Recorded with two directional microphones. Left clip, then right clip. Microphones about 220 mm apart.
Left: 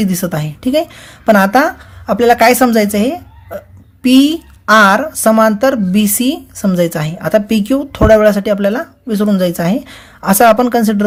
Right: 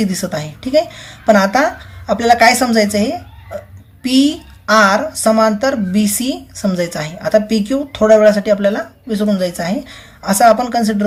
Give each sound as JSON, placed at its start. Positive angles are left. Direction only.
{"t": 0.0, "sound": "a woman's voice", "side_deg": 40}